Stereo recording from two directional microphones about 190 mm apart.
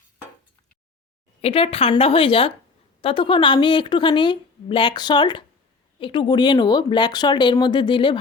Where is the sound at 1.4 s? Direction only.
30° left (ahead or behind).